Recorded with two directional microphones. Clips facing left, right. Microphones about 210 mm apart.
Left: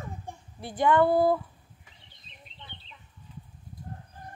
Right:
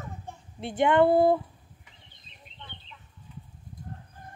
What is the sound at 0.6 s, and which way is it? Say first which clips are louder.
Speech: right 2 dB; 25° right (ahead or behind).